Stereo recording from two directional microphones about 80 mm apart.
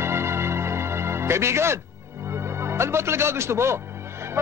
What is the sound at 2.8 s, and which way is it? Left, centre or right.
Speech, right.